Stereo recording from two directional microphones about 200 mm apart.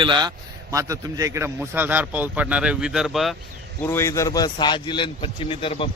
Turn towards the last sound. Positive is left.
turn(degrees=25)  # may be behind; listen again after turning